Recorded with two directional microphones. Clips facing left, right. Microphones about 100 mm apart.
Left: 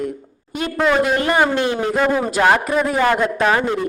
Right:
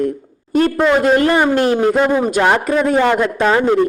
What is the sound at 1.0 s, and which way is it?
Speech, 45° right (ahead or behind).